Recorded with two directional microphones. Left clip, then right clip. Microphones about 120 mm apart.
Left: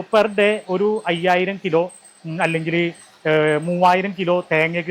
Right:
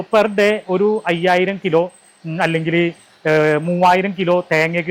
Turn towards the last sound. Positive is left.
turn(degrees=15)  # may be behind; listen again after turning